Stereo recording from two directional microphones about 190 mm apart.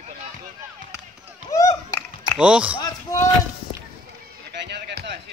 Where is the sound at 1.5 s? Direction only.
15° left (ahead or behind).